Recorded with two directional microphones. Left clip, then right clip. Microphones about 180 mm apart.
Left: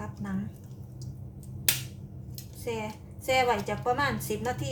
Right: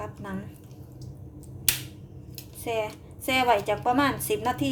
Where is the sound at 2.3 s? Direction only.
45° right (ahead or behind).